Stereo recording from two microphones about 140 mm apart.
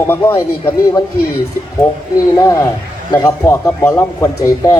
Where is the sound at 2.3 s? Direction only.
25° left (ahead or behind).